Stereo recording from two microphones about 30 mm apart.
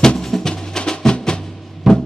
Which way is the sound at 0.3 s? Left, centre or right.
Centre.